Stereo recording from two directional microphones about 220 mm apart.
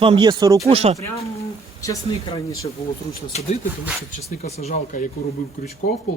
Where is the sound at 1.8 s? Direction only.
15° left (ahead or behind).